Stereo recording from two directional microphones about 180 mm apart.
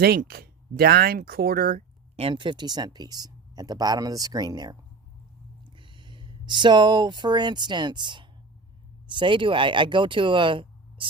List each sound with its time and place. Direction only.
0.0 s speech: 60° right (ahead or behind)
2.1 s speech: 30° right (ahead or behind)